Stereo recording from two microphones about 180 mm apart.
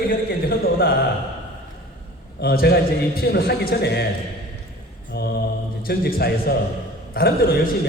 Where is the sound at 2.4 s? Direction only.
60° left (ahead or behind).